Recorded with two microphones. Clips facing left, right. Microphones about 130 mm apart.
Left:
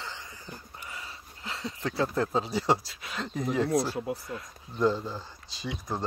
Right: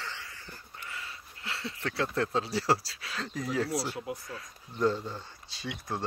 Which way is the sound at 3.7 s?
50° left (ahead or behind).